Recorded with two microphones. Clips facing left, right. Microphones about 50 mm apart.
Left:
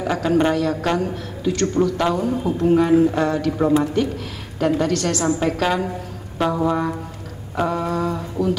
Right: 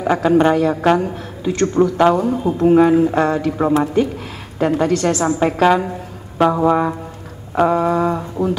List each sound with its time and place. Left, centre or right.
0.0 s a woman's voice: right